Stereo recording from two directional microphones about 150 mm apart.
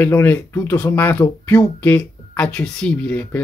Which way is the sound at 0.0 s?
15° left (ahead or behind).